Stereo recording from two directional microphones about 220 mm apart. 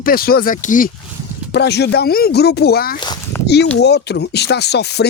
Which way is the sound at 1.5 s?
50° left (ahead or behind).